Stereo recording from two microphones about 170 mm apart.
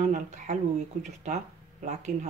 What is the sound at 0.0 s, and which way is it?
Speech, 45° right (ahead or behind).